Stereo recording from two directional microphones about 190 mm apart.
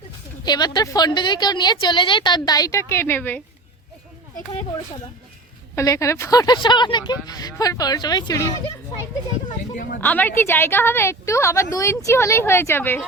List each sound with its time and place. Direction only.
0.4 s a woman's voice: 20° left (ahead or behind)
5.7 s a woman's voice: 15° left (ahead or behind)
10.0 s a woman's voice: 10° left (ahead or behind)